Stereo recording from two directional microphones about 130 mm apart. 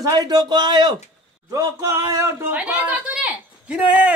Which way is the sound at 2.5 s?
10° right (ahead or behind).